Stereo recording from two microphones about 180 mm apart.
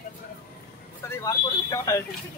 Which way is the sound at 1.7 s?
15° left (ahead or behind).